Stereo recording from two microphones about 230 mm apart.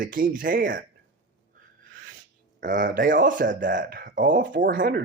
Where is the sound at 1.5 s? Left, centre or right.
Right.